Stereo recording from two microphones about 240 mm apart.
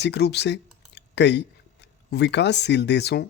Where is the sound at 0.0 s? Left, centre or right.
Left.